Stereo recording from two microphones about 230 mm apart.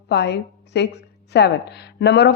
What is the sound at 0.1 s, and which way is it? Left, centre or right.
A woman's voice, left.